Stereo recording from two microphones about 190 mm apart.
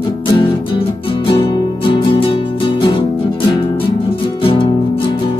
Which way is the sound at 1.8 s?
25° left (ahead or behind).